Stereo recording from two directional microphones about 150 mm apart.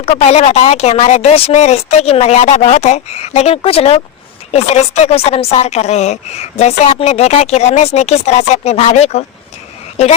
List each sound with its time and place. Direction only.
0.0 s speech: 45° left (ahead or behind)